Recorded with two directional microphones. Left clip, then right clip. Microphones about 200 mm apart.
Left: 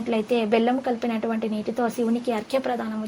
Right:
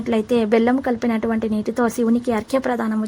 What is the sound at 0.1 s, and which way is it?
A woman's voice, 30° right (ahead or behind).